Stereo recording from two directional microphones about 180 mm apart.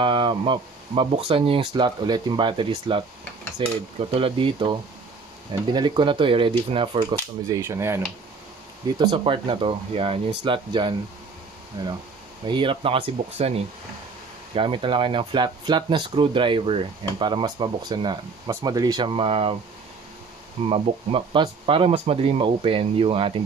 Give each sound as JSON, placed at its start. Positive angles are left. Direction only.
{"t": 0.0, "sound": "speech", "side_deg": -30}
{"t": 8.9, "sound": "speech", "side_deg": -25}
{"t": 12.4, "sound": "speech", "side_deg": -30}
{"t": 14.5, "sound": "speech", "side_deg": -30}
{"t": 20.6, "sound": "speech", "side_deg": -30}